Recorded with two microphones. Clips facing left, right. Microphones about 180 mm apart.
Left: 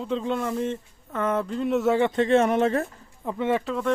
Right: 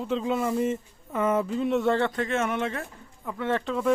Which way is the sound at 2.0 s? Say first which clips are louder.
Left 6 dB; 25° left (ahead or behind).